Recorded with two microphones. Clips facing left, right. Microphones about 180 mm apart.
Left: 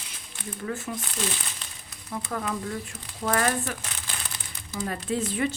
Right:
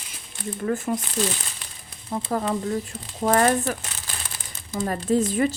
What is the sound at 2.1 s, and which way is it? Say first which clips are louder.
Speech: right 6 dB; 35° right (ahead or behind).